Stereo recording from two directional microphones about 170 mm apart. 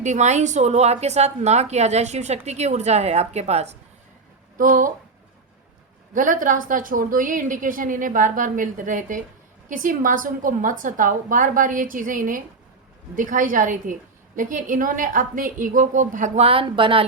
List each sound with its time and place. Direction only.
0.0 s a woman's voice: 45° right (ahead or behind)
4.5 s a woman's voice: 50° right (ahead or behind)
6.1 s a woman's voice: 50° right (ahead or behind); by 17.1 s 30° right (ahead or behind)